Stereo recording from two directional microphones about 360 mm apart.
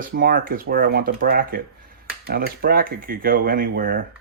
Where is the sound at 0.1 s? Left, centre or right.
Right.